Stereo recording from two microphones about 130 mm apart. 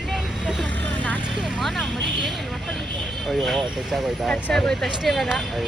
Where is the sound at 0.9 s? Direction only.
10° left (ahead or behind).